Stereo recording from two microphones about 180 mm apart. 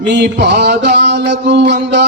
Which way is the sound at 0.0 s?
70° right (ahead or behind).